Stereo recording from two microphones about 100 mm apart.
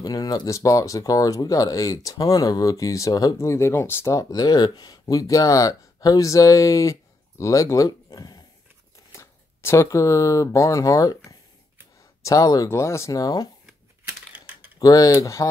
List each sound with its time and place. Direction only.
0.0 s speech: 40° left (ahead or behind)
3.3 s speech: 30° left (ahead or behind)
9.1 s speech: 25° left (ahead or behind)
14.3 s typing: 15° right (ahead or behind)
14.8 s speech: 40° left (ahead or behind)